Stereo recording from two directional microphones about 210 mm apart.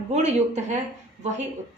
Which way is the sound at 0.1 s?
30° right (ahead or behind).